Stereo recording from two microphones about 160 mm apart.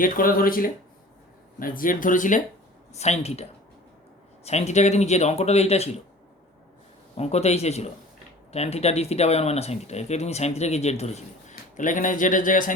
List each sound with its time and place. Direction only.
0.0 s speech: 60° left (ahead or behind)
2.9 s speech: 45° left (ahead or behind)
4.4 s speech: 45° left (ahead or behind)
7.2 s a man's voice: 40° left (ahead or behind)